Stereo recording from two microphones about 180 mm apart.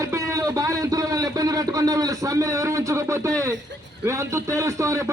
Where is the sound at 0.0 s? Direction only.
15° right (ahead or behind).